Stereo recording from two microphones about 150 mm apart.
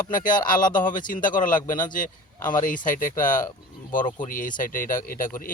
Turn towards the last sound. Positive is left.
turn(degrees=65)  # may be behind; listen again after turning